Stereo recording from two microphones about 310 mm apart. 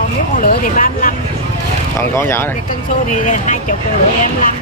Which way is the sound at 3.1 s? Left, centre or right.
Left.